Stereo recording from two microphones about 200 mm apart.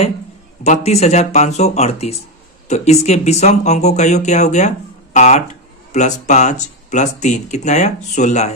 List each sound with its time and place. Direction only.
0.6 s speech: 35° left (ahead or behind)